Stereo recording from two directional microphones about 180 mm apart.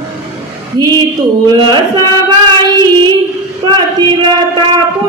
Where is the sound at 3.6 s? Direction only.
25° right (ahead or behind).